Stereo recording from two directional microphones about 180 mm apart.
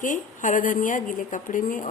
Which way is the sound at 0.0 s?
45° left (ahead or behind).